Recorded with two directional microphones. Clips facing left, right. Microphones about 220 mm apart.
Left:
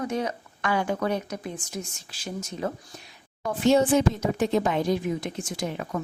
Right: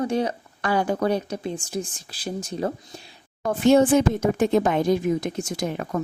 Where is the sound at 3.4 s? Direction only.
55° right (ahead or behind).